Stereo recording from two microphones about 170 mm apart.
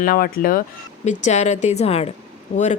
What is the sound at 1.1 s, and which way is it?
A woman's voice, 45° left (ahead or behind).